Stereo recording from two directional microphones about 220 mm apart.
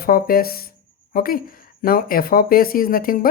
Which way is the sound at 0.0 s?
45° left (ahead or behind).